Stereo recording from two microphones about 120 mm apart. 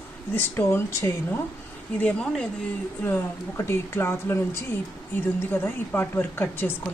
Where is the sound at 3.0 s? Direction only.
20° left (ahead or behind).